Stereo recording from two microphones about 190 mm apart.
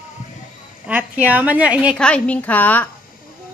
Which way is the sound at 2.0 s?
5° left (ahead or behind).